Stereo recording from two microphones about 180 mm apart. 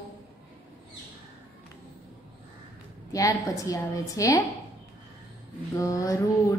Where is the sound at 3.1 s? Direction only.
20° left (ahead or behind).